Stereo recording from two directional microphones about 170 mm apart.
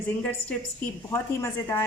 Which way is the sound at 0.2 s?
10° left (ahead or behind).